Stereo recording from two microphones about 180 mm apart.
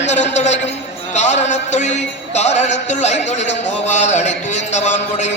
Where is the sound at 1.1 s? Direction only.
40° left (ahead or behind).